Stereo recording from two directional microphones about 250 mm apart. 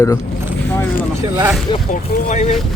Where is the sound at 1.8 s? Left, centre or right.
Left.